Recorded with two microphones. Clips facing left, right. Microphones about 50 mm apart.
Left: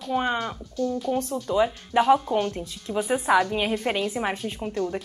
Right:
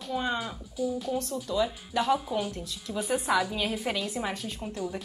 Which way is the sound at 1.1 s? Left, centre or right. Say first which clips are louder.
Left 5 dB; left.